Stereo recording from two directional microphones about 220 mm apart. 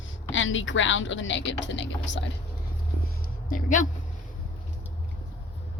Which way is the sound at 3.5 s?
35° left (ahead or behind).